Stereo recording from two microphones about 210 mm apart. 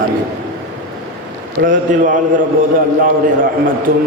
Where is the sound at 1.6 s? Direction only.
40° right (ahead or behind).